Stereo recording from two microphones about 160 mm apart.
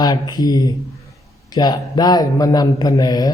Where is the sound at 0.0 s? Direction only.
25° left (ahead or behind).